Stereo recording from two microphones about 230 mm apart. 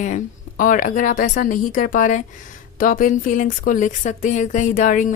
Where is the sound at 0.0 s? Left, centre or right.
Left.